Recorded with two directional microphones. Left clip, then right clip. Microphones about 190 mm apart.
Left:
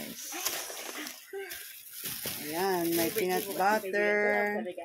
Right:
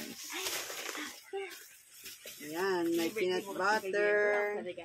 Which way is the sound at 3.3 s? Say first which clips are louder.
Left 4 dB; 25° left (ahead or behind).